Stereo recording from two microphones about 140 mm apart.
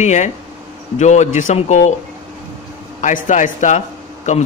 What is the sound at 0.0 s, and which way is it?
Speech, 55° left (ahead or behind).